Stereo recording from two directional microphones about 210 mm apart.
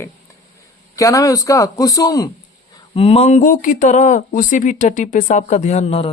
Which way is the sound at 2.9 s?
30° left (ahead or behind).